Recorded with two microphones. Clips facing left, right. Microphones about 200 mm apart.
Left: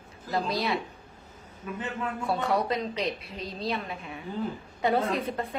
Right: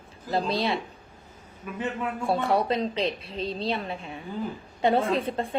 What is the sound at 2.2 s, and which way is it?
A woman's voice, 30° right (ahead or behind).